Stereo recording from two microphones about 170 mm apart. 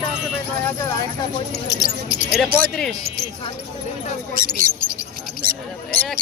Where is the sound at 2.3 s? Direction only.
Centre (ahead or behind).